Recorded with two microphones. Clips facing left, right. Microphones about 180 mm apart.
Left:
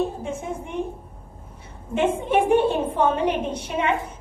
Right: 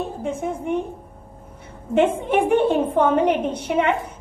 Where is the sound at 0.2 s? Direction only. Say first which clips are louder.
Right 4 dB; 55° right (ahead or behind).